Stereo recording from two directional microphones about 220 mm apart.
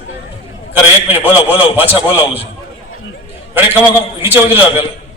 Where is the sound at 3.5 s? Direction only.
10° right (ahead or behind).